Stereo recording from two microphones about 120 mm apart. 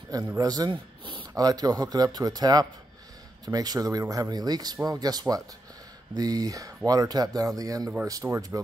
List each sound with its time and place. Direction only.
0.4 s speech: 30° right (ahead or behind)
1.3 s speech: 30° right (ahead or behind)